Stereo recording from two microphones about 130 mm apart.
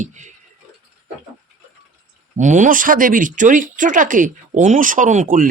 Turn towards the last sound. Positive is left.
turn(degrees=-90)